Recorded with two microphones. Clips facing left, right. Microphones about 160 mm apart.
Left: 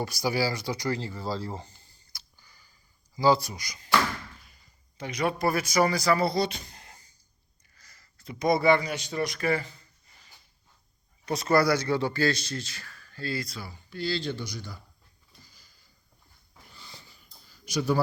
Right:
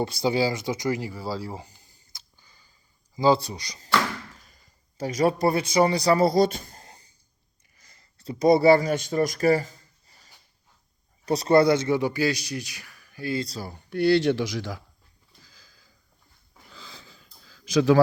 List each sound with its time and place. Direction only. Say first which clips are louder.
0.0 s speech: right 4 dB; 25° right (ahead or behind); by 6.8 s 50° right (ahead or behind)
6.8 s cough: right 3 dB; 30° right (ahead or behind)
7.8 s a sound: right 1 dB; 25° right (ahead or behind)
11.3 s a man's voice: right 5 dB; 35° right (ahead or behind); by 13.4 s 15° right (ahead or behind)
13.4 s speech: right 6 dB; 35° right (ahead or behind)
13.7 s speech: right 13 dB; 60° right (ahead or behind); by 14.8 s 90° right
17.2 s a sound: right 3 dB; 90° right